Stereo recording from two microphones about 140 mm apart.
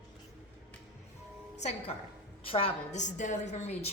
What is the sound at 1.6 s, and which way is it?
A woman's voice, 50° left (ahead or behind).